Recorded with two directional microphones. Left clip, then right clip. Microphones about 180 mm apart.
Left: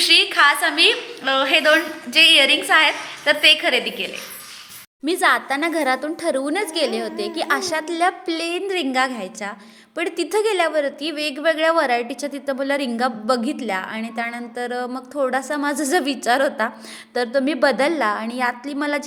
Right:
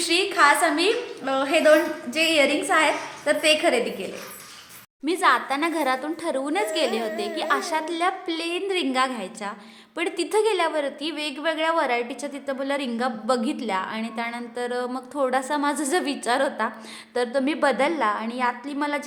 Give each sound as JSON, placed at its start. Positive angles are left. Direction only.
{"t": 0.0, "sound": "a woman's voice", "side_deg": -5}
{"t": 5.0, "sound": "a woman's voice", "side_deg": 15}